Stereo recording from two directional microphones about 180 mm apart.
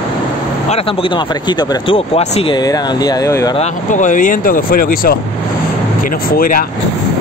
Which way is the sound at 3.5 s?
45° left (ahead or behind).